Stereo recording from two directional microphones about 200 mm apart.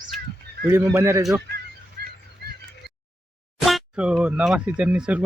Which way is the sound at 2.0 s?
50° right (ahead or behind).